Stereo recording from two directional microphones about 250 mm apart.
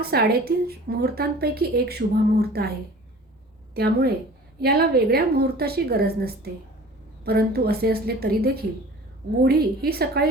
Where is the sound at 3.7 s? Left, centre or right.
Right.